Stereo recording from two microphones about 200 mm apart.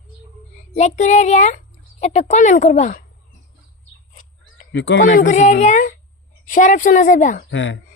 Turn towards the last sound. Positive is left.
turn(degrees=65)  # may be behind; listen again after turning